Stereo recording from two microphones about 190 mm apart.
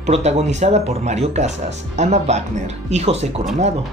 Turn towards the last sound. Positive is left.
turn(degrees=-35)  # may be behind; listen again after turning